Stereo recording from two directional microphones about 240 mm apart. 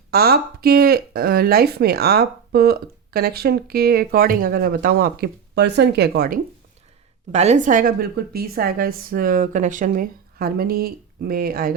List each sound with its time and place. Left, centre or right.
0.1 s speech: right
7.3 s speech: right